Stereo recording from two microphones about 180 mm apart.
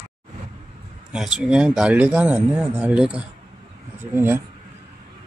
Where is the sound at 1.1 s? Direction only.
5° right (ahead or behind).